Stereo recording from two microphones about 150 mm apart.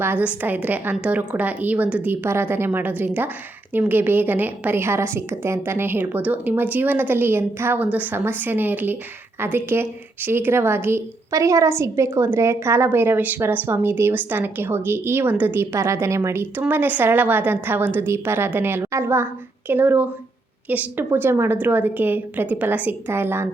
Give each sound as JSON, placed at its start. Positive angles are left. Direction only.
{"t": 0.0, "sound": "a woman's voice", "side_deg": -15}